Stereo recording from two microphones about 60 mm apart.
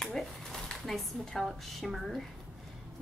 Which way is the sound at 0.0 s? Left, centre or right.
Centre.